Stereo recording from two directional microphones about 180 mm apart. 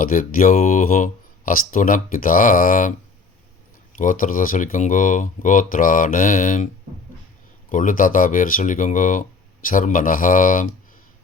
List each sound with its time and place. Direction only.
0.0 s speech: 50° left (ahead or behind)
3.9 s speech: 45° left (ahead or behind)
7.7 s speech: 45° left (ahead or behind)